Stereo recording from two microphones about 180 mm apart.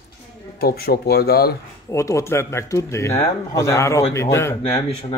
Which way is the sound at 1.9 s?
15° left (ahead or behind).